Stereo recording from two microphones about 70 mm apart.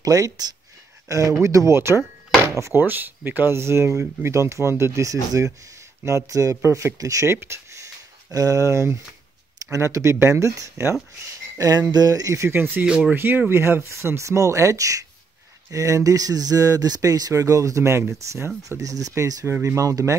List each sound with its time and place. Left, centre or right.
0.0 s speech: right
2.4 s drawer open or close: right
2.7 s speech: right
7.0 s speech: right
7.2 s a sound: right
9.7 s speech: right
12.4 s speech: right
18.8 s speech: right
19.4 s speech: right